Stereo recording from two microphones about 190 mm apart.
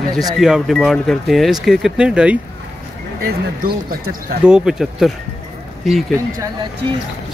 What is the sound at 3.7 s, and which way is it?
Speech, 55° right (ahead or behind).